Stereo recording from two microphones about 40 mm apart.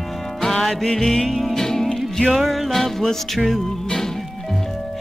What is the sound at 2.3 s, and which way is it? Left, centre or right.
Music, centre.